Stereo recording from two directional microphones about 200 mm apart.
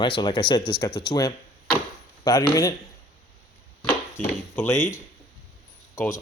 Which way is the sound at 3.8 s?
10° left (ahead or behind).